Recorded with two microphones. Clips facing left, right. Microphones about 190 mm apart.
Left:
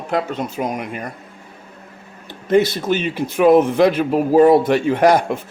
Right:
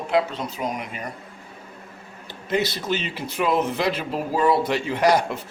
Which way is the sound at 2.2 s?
50° left (ahead or behind).